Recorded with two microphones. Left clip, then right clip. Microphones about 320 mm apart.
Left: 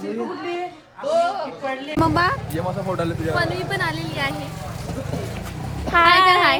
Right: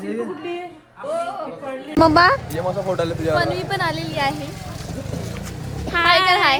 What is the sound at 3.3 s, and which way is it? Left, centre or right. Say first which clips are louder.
Speech: right 2 dB; centre.